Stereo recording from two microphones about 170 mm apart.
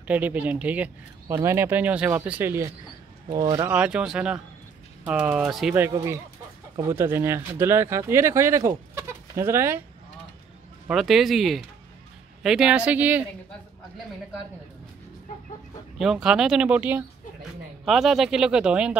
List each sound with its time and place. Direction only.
0.0 s speech: 10° right (ahead or behind)
3.3 s speech: 25° right (ahead or behind)
3.6 s speech: 10° right (ahead or behind)
6.8 s speech: 15° right (ahead or behind)
10.9 s speech: centre (ahead or behind)
16.0 s speech: 5° right (ahead or behind)